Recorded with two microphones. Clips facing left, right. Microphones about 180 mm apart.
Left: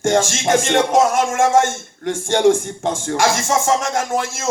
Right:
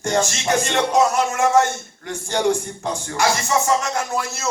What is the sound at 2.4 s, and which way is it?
Speech, 50° left (ahead or behind).